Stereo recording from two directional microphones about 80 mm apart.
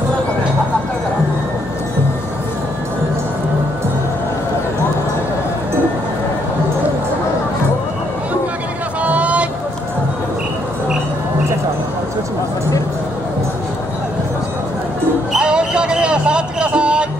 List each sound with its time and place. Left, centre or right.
9.0 s vehicle: centre
15.3 s music: centre